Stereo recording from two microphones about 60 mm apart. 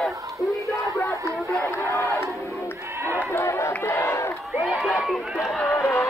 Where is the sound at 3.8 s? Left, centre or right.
Left.